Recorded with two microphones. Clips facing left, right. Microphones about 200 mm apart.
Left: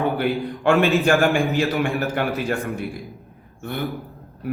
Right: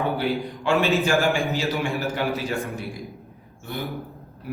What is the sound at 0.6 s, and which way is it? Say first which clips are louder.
A man's voice: left 4 dB; 55° left (ahead or behind).